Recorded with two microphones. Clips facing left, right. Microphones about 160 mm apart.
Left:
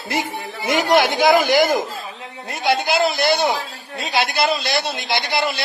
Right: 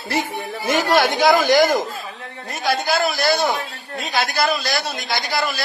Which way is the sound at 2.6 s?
25° left (ahead or behind).